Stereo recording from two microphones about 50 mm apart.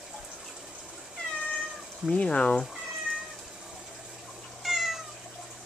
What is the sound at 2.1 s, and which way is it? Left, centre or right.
Speech, centre.